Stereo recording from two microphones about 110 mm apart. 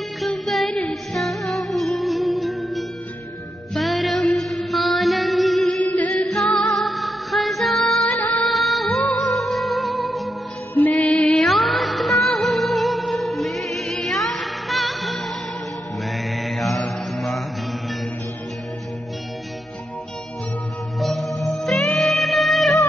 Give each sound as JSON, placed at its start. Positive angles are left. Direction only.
{"t": 0.2, "sound": "music", "side_deg": 0}
{"t": 10.7, "sound": "music", "side_deg": 15}
{"t": 16.3, "sound": "mantra", "side_deg": 0}
{"t": 21.0, "sound": "music", "side_deg": 0}